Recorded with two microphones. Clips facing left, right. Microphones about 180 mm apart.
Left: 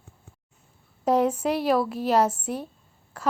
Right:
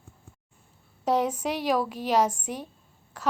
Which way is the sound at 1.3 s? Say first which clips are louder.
Left 3 dB; 10° left (ahead or behind).